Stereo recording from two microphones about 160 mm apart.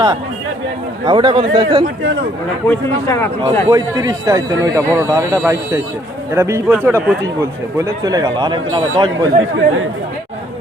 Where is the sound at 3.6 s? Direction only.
20° right (ahead or behind).